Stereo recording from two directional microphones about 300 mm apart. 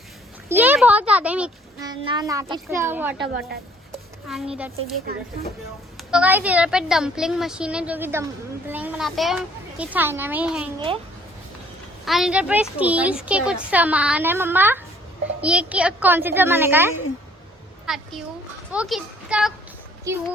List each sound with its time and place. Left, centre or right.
0.4 s a child's voice: centre
4.3 s a woman's voice: centre
6.0 s a woman's voice: centre
10.8 s a child's voice: centre
12.0 s a woman's voice: centre